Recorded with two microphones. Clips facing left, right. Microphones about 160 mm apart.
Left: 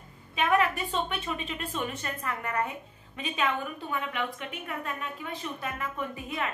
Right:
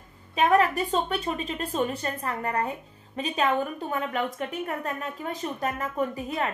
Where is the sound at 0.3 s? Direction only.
40° right (ahead or behind).